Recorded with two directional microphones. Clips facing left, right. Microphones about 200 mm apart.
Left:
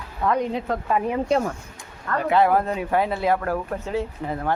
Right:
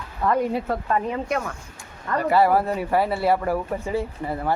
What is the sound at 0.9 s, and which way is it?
Speech, 10° left (ahead or behind).